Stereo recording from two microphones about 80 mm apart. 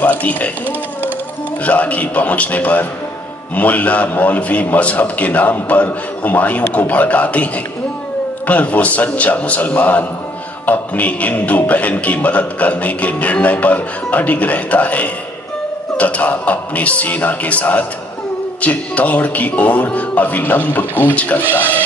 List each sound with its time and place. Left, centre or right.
0.0 s speech: centre
1.6 s a man's voice: centre